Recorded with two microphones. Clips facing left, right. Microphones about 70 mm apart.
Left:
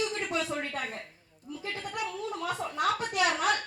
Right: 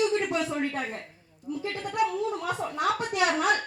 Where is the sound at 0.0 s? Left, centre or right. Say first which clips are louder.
Right 6 dB; centre.